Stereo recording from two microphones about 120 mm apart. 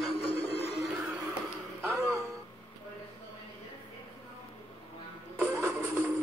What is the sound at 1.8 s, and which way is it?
Speech, 25° right (ahead or behind).